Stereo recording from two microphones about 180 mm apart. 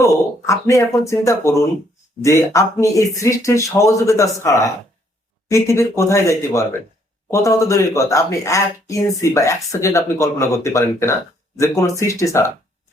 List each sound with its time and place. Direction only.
0.4 s speech: 15° left (ahead or behind)